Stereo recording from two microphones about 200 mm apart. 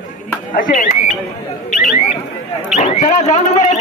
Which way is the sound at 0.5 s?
40° left (ahead or behind).